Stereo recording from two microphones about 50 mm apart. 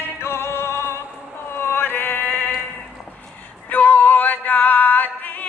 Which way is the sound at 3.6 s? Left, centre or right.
Left.